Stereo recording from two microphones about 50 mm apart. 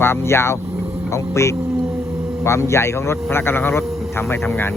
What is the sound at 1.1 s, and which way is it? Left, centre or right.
Speech, left.